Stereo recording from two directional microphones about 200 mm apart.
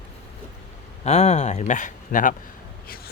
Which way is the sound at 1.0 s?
35° left (ahead or behind).